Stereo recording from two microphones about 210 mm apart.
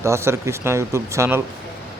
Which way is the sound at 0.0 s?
15° right (ahead or behind).